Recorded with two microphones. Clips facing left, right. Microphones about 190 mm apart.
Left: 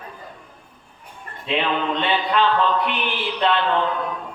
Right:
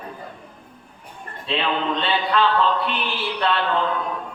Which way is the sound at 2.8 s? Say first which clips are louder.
Left 1 dB; 20° left (ahead or behind).